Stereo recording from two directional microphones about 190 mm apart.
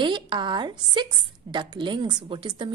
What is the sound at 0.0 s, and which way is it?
A woman's voice, 25° right (ahead or behind).